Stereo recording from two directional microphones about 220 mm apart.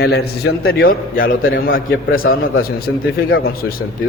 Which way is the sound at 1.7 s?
65° left (ahead or behind).